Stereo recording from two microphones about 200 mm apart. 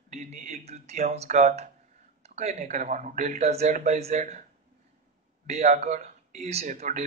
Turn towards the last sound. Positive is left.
turn(degrees=-35)  # may be behind; listen again after turning